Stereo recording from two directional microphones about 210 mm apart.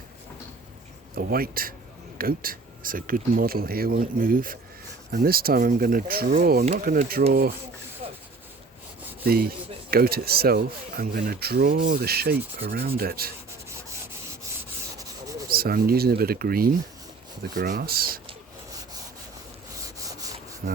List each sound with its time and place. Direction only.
1.1 s speech: 45° right (ahead or behind)
8.0 s a sound: 30° right (ahead or behind)
9.2 s speech: 45° right (ahead or behind)
14.9 s rub: 15° right (ahead or behind)
15.4 s speech: 45° right (ahead or behind)
19.7 s wood: 15° right (ahead or behind)
20.6 s speech: 45° right (ahead or behind)